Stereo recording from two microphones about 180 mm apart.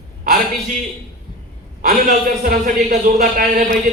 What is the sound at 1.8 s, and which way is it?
A man's voice, 55° right (ahead or behind).